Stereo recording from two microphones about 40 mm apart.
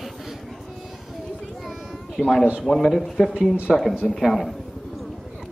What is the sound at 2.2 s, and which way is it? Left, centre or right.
Speech, centre.